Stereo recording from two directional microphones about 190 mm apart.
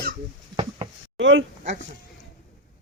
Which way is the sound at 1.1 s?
80° right.